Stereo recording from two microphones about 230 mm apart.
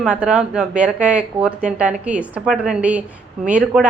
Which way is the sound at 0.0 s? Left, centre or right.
Centre.